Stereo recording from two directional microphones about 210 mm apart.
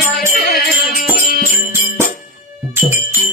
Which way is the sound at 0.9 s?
40° left (ahead or behind).